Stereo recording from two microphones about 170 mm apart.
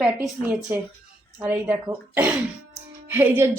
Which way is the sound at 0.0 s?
10° right (ahead or behind).